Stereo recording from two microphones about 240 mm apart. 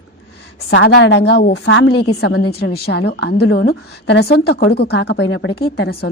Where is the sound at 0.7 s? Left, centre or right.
Left.